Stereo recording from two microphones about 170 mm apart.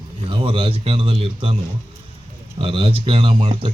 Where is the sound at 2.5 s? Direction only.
30° right (ahead or behind).